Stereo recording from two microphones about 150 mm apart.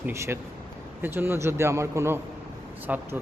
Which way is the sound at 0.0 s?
15° right (ahead or behind).